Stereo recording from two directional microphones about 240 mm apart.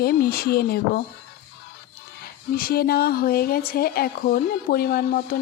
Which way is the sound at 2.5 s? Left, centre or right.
Left.